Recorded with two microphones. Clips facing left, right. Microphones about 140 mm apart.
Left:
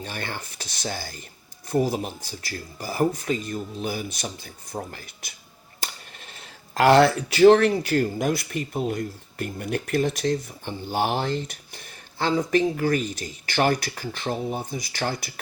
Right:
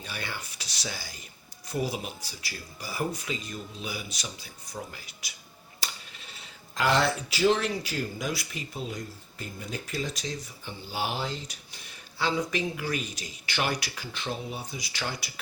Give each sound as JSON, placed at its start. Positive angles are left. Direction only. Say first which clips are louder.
{"t": 0.0, "sound": "speech", "louder": "left 5 dB", "side_deg": 45}
{"t": 6.7, "sound": "speech", "louder": "left 9 dB", "side_deg": 65}